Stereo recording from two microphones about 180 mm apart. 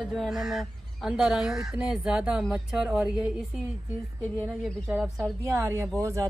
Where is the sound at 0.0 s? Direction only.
Centre (ahead or behind).